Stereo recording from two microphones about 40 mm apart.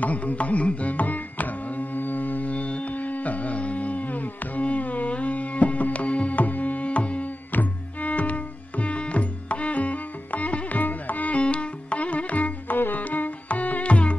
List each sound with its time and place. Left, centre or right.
0.0 s carnatic music: left
7.5 s music: left
11.3 s music: left